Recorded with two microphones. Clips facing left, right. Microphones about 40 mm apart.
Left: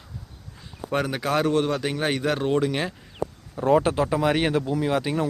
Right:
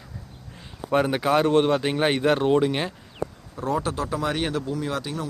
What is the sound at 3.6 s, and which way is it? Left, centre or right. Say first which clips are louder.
Speech: left 6 dB; left.